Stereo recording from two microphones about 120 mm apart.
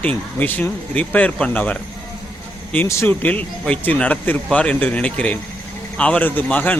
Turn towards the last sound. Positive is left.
turn(degrees=15)  # may be behind; listen again after turning